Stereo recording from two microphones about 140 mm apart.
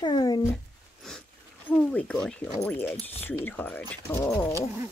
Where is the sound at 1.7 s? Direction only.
5° left (ahead or behind); by 4.3 s 20° left (ahead or behind).